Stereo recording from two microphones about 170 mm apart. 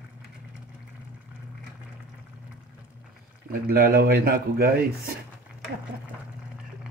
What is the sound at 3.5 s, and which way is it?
Speech, 65° right (ahead or behind).